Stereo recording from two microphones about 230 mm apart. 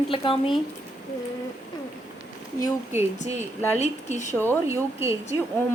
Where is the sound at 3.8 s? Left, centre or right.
Left.